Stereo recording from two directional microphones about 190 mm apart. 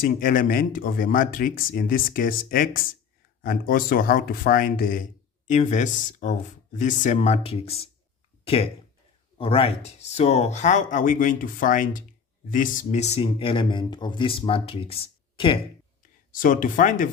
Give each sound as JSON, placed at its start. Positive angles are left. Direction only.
{"t": 0.0, "sound": "speech", "side_deg": 45}
{"t": 9.4, "sound": "speech", "side_deg": 30}
{"t": 16.3, "sound": "speech", "side_deg": 45}